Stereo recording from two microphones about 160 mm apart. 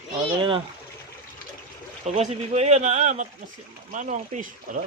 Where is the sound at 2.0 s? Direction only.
45° right (ahead or behind).